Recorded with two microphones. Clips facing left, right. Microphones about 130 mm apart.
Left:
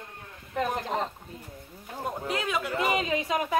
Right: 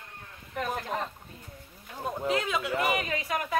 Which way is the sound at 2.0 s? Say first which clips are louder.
Right 2 dB; centre (ahead or behind).